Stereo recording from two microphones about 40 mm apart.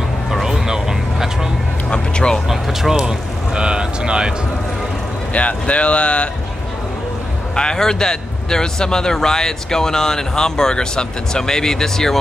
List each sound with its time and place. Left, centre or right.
0.3 s vehicle: centre
1.9 s vehicle: left
2.4 s vehicle: centre
5.3 s speech: left
7.5 s a man's voice: centre